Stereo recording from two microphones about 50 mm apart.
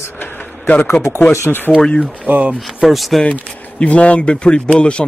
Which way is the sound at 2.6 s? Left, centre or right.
Centre.